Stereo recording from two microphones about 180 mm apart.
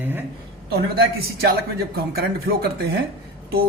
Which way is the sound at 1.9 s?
60° right (ahead or behind).